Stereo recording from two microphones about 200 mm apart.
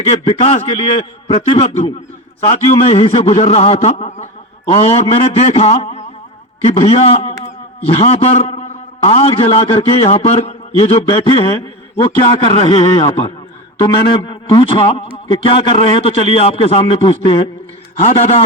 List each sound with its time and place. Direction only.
0.0 s a man's voice: 30° left (ahead or behind)